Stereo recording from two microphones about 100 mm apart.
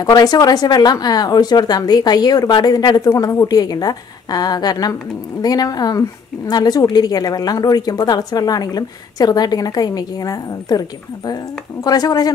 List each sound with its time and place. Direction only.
0.0 s speech: 40° left (ahead or behind)
11.8 s speech: 40° left (ahead or behind)